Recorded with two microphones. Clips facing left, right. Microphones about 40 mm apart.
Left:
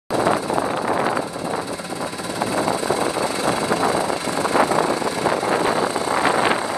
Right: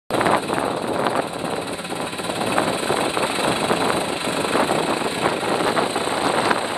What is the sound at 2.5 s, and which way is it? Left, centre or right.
Vehicle, right.